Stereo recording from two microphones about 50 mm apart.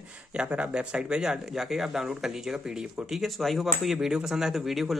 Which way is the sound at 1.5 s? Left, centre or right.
Centre.